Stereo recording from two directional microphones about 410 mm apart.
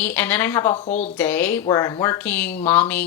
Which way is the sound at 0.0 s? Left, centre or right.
Centre.